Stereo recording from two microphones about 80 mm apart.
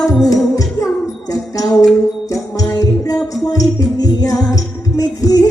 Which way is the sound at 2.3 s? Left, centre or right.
Left.